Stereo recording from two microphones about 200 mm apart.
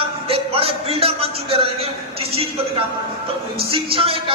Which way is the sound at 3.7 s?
25° right (ahead or behind).